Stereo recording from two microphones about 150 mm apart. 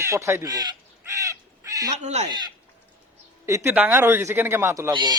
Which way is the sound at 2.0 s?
50° right (ahead or behind).